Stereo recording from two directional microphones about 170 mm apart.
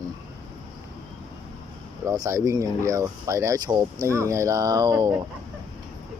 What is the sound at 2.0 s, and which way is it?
Speech, 20° right (ahead or behind).